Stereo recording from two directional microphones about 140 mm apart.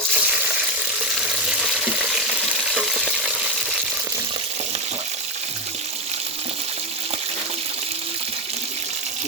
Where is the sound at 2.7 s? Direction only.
Centre (ahead or behind).